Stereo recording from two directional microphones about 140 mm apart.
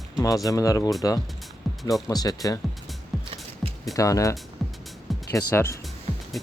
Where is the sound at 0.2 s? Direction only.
25° left (ahead or behind).